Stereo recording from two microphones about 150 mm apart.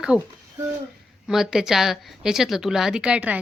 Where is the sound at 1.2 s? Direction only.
5° right (ahead or behind).